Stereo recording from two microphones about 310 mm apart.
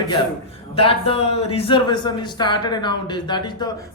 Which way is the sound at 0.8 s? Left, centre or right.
Centre.